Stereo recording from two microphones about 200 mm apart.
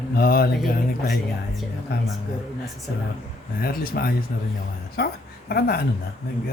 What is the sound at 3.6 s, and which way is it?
A woman's voice, 50° left (ahead or behind).